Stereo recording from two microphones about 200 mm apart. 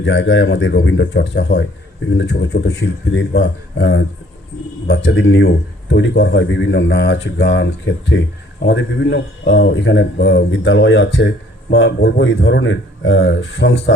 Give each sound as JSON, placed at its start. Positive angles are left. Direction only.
{"t": 0.0, "sound": "a man's voice", "side_deg": 70}